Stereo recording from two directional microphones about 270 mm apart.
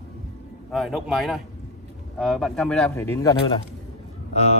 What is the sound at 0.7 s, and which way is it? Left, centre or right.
Speech, centre.